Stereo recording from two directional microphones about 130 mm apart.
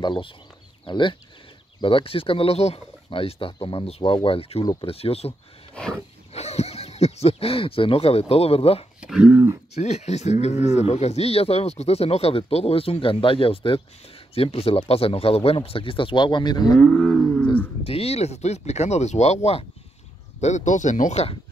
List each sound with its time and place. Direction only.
0.0 s speech: 40° left (ahead or behind)
5.8 s speech: 10° left (ahead or behind)
6.3 s speech: 55° left (ahead or behind)
9.0 s speech: 5° right (ahead or behind)
9.8 s speech: 55° left (ahead or behind); by 16.7 s 35° left (ahead or behind)
16.7 s speech: 5° left (ahead or behind)
17.8 s speech: 50° left (ahead or behind); by 21.3 s 65° left (ahead or behind)